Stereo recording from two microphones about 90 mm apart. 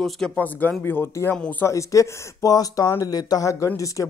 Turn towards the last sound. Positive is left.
turn(degrees=40)  # may be behind; listen again after turning